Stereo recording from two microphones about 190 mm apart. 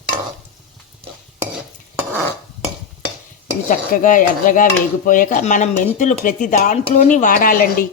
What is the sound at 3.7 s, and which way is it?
Speech, 45° left (ahead or behind).